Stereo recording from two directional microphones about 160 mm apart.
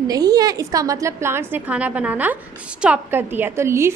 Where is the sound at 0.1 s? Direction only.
25° right (ahead or behind).